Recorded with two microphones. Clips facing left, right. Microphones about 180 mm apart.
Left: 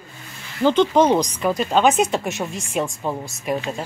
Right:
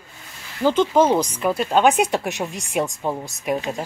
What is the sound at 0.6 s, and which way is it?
Speech, 5° right (ahead or behind).